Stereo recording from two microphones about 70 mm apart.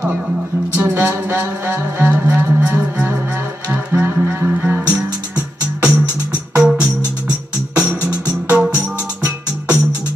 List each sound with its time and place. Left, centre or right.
0.7 s music: right
4.9 s music: centre
8.5 s music: centre